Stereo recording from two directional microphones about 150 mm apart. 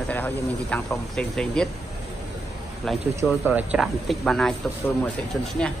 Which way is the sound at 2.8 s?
5° left (ahead or behind).